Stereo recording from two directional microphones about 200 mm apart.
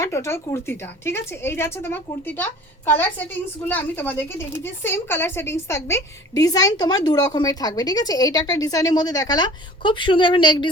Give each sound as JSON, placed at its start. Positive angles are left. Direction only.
{"t": 0.0, "sound": "a woman's voice", "side_deg": 15}